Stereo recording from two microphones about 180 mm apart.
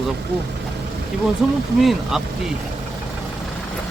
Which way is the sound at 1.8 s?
Centre (ahead or behind).